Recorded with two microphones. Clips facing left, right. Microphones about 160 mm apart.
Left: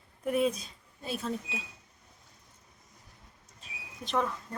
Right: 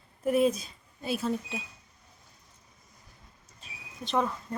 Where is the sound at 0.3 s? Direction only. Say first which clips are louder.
Right 4 dB; centre (ahead or behind).